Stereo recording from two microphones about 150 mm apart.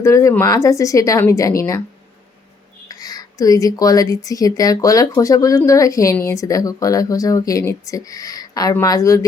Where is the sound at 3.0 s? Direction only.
25° left (ahead or behind).